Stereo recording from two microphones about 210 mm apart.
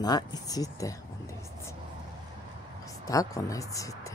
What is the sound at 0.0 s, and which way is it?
Speech, 20° left (ahead or behind).